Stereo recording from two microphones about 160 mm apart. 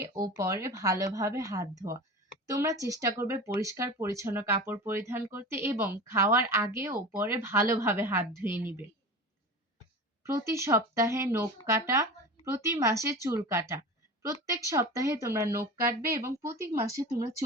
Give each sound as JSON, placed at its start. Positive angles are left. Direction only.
{"t": 0.2, "sound": "a woman's voice", "side_deg": -20}
{"t": 10.3, "sound": "a woman's voice", "side_deg": -15}